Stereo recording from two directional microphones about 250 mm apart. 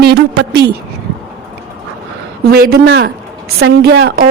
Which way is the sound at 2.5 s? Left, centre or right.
Right.